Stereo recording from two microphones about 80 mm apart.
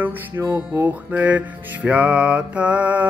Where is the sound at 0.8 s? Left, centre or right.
Right.